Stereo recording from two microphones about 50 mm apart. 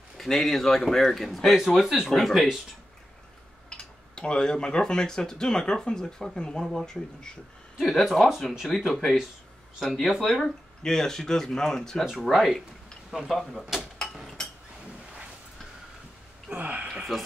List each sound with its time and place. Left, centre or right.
0.2 s speech: centre
2.0 s speech: centre
3.7 s speech: centre
7.8 s speech: centre
12.3 s speech: centre
16.5 s speech: right
16.8 s a sound: centre